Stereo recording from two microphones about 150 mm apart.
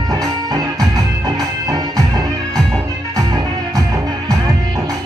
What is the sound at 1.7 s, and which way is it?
Music, 25° right (ahead or behind).